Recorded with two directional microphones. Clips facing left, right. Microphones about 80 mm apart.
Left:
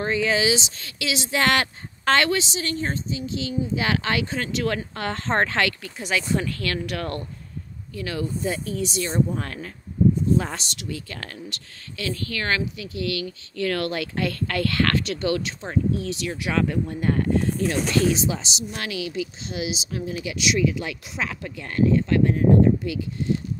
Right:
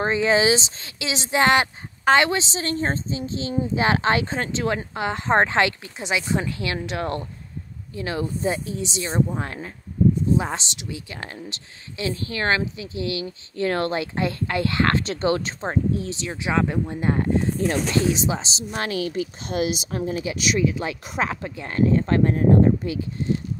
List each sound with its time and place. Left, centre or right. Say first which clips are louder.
0.0 s a woman's voice: right 3 dB; right
20.1 s speech: right 1 dB; right